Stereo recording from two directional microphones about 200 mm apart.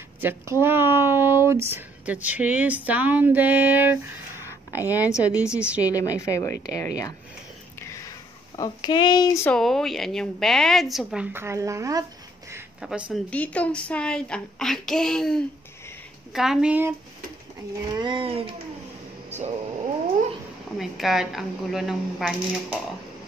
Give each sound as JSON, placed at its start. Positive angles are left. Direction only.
{"t": 0.2, "sound": "speech", "side_deg": -10}
{"t": 4.4, "sound": "a sound", "side_deg": 15}
{"t": 4.7, "sound": "a woman's voice", "side_deg": -10}
{"t": 5.9, "sound": "a woman's voice", "side_deg": 15}
{"t": 8.5, "sound": "speech", "side_deg": 20}
{"t": 9.6, "sound": "a woman's voice", "side_deg": 0}
{"t": 13.1, "sound": "a woman's voice", "side_deg": 5}
{"t": 17.9, "sound": "speech", "side_deg": -25}
{"t": 20.7, "sound": "a woman's voice", "side_deg": 0}